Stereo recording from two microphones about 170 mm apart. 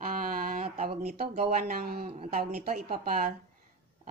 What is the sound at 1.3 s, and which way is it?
Speech, 35° right (ahead or behind).